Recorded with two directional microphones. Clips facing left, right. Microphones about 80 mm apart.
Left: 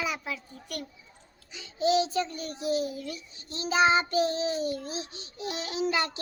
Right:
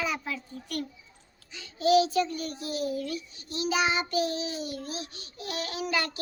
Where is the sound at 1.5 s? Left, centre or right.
Left.